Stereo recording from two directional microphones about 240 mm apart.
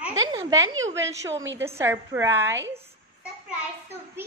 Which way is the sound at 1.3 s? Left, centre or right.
Right.